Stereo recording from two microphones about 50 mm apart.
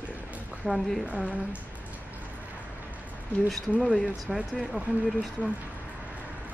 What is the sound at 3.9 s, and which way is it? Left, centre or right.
Speech, centre.